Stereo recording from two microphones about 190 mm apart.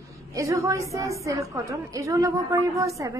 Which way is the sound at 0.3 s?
15° right (ahead or behind).